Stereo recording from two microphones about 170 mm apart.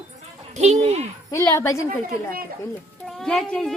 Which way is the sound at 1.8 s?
60° right (ahead or behind).